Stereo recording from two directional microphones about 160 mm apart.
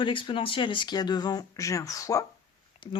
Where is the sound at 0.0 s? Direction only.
30° left (ahead or behind).